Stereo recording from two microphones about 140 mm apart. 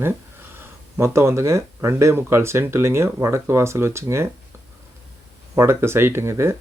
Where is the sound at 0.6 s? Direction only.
20° right (ahead or behind).